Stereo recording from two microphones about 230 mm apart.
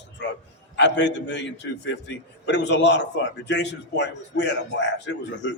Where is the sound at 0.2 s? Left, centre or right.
Left.